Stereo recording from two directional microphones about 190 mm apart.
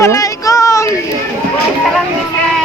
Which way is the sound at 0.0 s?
15° left (ahead or behind).